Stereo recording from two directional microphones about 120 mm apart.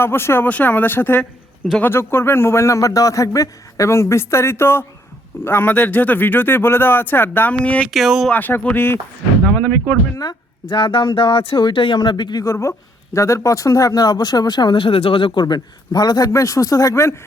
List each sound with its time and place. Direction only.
0.0 s a man's voice: 20° left (ahead or behind)
7.9 s speech: centre (ahead or behind)
8.3 s speech: 15° left (ahead or behind)
10.2 s speech: 40° left (ahead or behind)